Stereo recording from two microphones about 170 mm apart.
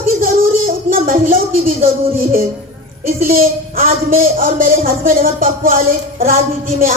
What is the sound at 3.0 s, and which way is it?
Speech, 60° right (ahead or behind).